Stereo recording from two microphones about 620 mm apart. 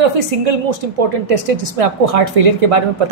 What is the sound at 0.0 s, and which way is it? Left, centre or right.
Speech, right.